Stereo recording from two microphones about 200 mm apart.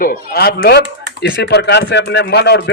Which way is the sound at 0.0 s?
45° left (ahead or behind).